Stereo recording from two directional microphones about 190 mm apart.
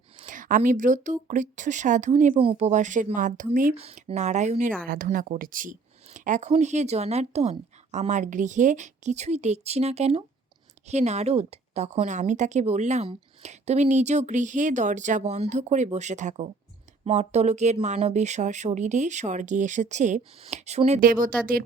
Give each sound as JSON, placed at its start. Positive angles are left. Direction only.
{"t": 0.2, "sound": "a woman's voice", "side_deg": -45}
{"t": 3.8, "sound": "a woman's voice", "side_deg": -35}